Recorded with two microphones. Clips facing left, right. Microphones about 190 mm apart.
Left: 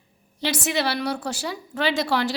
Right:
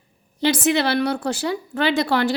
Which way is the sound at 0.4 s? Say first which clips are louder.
Right 6 dB; 55° right (ahead or behind).